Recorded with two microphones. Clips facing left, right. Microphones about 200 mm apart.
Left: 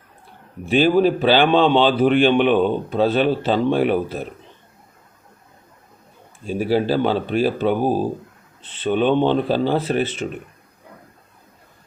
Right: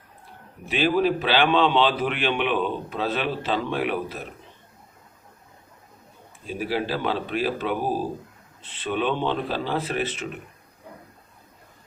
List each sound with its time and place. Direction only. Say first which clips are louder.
0.6 s a man's voice: left 6 dB; 30° left (ahead or behind)
6.5 s a man's voice: left 8 dB; 30° left (ahead or behind)